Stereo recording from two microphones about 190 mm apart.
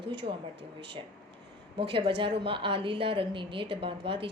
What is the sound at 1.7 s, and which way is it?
A woman's voice, 25° right (ahead or behind).